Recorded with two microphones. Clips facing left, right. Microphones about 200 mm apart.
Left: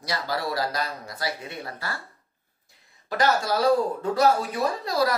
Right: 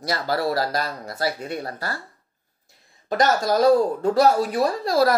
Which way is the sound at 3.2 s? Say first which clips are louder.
Right 4 dB; 40° right (ahead or behind).